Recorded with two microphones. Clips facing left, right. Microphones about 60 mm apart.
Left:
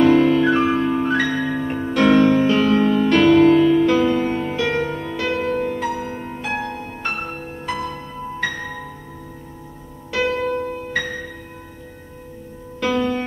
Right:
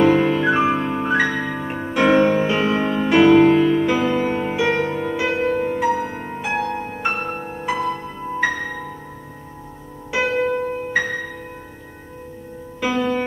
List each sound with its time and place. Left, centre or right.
0.0 s music: centre
10.1 s music: centre
12.8 s music: centre